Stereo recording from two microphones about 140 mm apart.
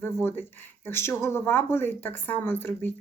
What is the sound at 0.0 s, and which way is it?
Speech, 15° left (ahead or behind).